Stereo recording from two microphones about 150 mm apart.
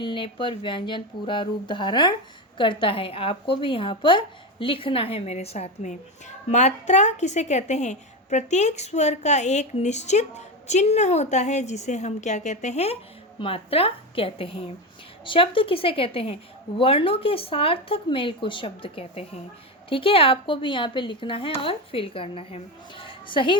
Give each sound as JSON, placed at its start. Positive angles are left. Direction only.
{"t": 0.0, "sound": "a woman's voice", "side_deg": 35}